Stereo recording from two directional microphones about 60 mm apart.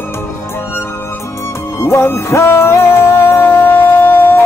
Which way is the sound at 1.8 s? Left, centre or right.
Left.